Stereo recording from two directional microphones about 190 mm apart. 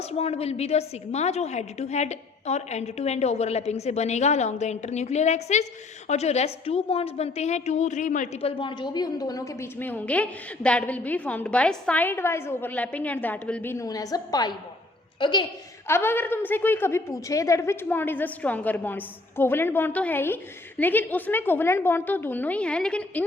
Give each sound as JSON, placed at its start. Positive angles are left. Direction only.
{"t": 0.0, "sound": "a woman's voice", "side_deg": 30}
{"t": 15.9, "sound": "a woman's voice", "side_deg": 10}